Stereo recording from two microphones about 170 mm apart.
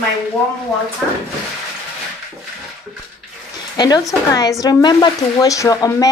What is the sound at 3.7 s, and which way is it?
Speech, 25° left (ahead or behind).